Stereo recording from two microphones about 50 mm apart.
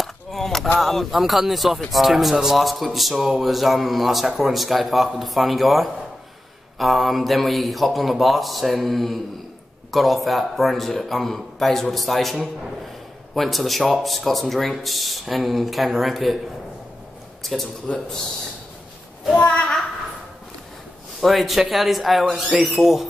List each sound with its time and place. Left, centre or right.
0.0 s a sound: centre
0.7 s a man's voice: centre
17.4 s a sound: centre
17.9 s a woman's voice: centre
19.4 s a woman's voice: left
21.2 s a man's voice: centre